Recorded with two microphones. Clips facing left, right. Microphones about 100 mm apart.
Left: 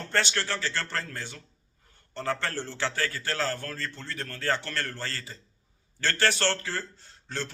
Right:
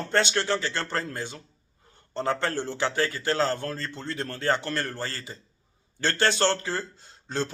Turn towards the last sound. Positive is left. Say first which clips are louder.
# right 6 dB
turn(degrees=-20)  # may be behind; listen again after turning